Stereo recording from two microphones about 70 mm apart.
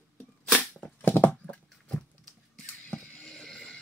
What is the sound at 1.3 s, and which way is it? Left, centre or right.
Horse, centre.